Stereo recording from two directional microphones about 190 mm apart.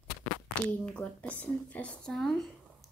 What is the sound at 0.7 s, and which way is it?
Speech, 5° left (ahead or behind).